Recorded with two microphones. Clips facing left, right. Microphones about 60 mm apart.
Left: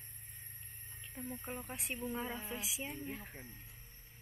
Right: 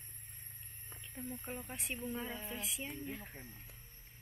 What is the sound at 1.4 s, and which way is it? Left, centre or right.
Speech, centre.